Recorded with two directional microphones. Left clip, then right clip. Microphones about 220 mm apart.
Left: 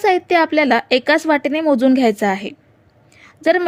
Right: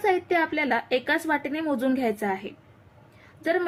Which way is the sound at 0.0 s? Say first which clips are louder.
Left 9 dB; 45° left (ahead or behind).